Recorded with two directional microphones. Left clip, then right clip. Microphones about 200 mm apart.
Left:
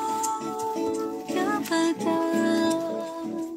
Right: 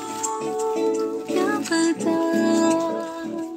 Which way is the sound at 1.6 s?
20° right (ahead or behind).